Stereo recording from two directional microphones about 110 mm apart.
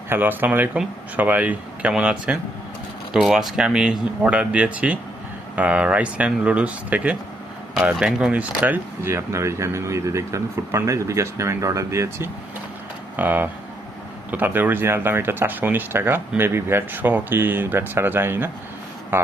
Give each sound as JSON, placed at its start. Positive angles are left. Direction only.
{"t": 0.1, "sound": "speech", "side_deg": -15}